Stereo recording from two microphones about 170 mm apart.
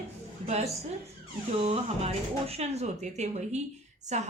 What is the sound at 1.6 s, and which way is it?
Speech, 35° right (ahead or behind).